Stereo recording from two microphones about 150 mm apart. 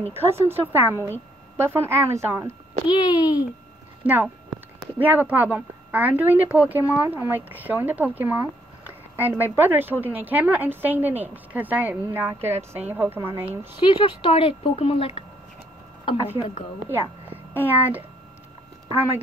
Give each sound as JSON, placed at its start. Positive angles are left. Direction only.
{"t": 0.1, "sound": "speech", "side_deg": -15}
{"t": 2.9, "sound": "a child's voice", "side_deg": 30}
{"t": 4.0, "sound": "speech", "side_deg": -10}
{"t": 13.7, "sound": "a woman's voice", "side_deg": 35}
{"t": 16.3, "sound": "a woman's voice", "side_deg": 40}
{"t": 16.9, "sound": "a child's voice", "side_deg": -10}